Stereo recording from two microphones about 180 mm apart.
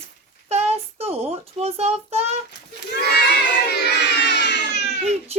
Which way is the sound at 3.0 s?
65° left (ahead or behind).